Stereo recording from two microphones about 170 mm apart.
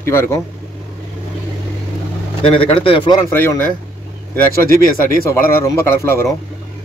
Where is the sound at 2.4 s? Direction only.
30° left (ahead or behind).